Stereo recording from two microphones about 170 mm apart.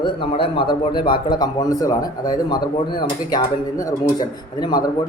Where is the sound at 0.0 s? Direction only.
30° left (ahead or behind).